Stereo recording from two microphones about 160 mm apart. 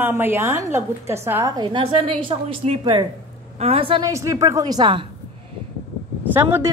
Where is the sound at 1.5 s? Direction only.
30° right (ahead or behind).